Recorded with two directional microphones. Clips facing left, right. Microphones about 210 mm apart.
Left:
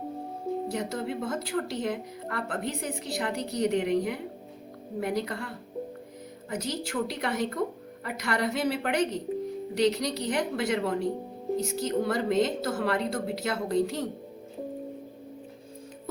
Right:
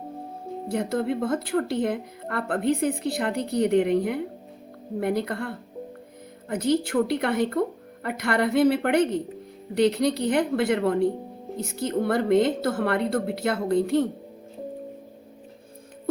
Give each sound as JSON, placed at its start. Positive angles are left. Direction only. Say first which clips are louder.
{"t": 0.7, "sound": "a woman's voice", "louder": "right 6 dB", "side_deg": -55}